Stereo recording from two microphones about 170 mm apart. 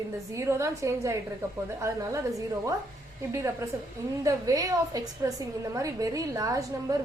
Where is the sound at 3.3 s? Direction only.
15° right (ahead or behind).